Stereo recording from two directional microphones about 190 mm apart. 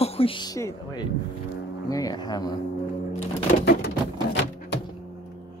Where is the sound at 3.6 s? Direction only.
55° left (ahead or behind).